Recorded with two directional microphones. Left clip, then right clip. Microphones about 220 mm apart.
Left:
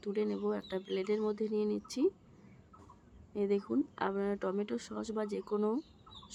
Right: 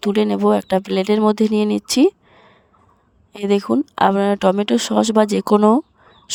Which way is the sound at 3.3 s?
50° right (ahead or behind).